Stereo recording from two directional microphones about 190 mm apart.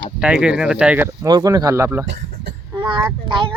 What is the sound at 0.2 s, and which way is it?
Speech, 5° right (ahead or behind).